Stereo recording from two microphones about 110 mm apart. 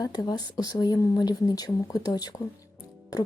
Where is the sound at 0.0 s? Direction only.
35° left (ahead or behind).